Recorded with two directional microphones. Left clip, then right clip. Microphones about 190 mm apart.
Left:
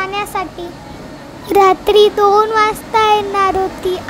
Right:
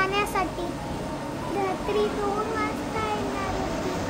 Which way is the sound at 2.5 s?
60° left (ahead or behind).